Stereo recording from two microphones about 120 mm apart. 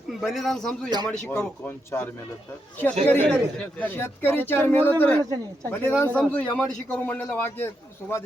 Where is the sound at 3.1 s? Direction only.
15° left (ahead or behind).